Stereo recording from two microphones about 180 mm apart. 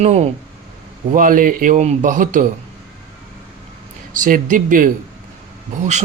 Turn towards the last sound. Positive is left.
turn(degrees=-40)  # may be behind; listen again after turning